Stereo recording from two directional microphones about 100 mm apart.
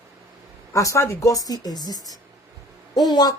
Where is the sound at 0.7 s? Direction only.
30° left (ahead or behind).